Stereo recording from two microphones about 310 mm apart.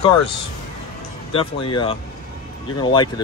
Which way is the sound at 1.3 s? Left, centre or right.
Centre.